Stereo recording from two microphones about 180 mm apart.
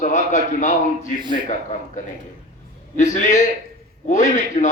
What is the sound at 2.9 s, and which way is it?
A man's voice, 40° left (ahead or behind).